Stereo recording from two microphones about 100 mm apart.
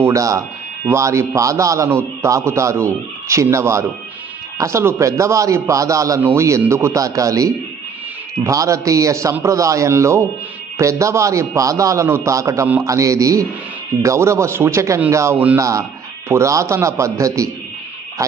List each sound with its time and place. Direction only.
0.0 s a man's voice: 30° right (ahead or behind)